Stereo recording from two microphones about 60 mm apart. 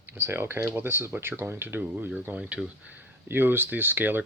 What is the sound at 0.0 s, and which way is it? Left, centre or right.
Speech, right.